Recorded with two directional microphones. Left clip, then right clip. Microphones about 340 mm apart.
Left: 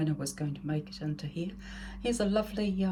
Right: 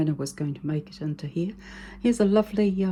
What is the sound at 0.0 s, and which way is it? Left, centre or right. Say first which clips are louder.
Speech: right 6 dB; centre.